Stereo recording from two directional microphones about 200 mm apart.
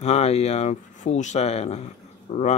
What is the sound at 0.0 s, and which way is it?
Speech, 30° left (ahead or behind).